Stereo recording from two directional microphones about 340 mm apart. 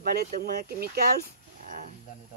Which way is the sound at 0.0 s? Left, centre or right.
Right.